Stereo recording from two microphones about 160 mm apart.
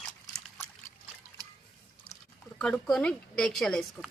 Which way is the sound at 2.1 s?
65° left (ahead or behind).